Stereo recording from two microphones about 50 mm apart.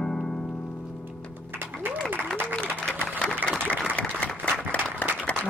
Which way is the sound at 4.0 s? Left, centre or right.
Left.